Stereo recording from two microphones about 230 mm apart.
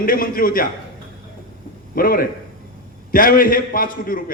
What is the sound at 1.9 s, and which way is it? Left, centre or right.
A man's voice, left.